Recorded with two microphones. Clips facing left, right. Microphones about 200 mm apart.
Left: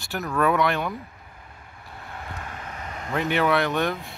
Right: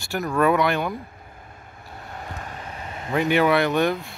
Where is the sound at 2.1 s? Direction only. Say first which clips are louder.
Right 1 dB; 40° right (ahead or behind).